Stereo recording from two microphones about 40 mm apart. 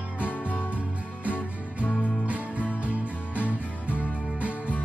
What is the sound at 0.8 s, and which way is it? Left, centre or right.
Music, right.